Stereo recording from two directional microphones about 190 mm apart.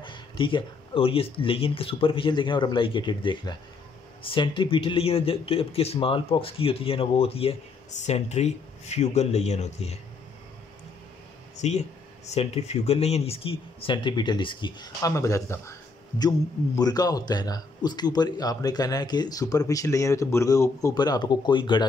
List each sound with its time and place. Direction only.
0.0 s speech: 25° left (ahead or behind)
11.5 s a sound: 35° left (ahead or behind)
12.4 s speech: 35° left (ahead or behind)